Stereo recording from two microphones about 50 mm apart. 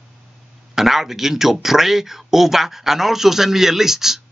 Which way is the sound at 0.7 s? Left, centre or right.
Centre.